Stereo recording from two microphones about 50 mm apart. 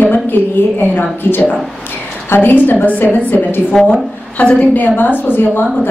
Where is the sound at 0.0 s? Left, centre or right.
Left.